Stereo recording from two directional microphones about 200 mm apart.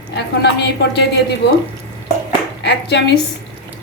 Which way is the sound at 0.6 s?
60° left (ahead or behind).